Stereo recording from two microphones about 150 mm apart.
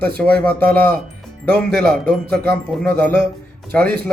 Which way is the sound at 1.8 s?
5° left (ahead or behind).